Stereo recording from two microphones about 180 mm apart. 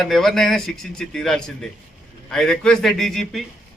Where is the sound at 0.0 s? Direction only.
Centre (ahead or behind).